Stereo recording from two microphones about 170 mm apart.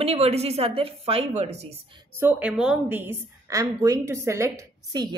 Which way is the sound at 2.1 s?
10° right (ahead or behind).